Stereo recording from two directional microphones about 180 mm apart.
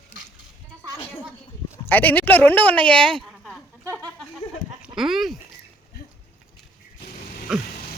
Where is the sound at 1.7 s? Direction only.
10° left (ahead or behind).